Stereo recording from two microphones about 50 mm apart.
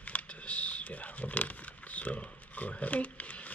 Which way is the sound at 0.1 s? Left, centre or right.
Left.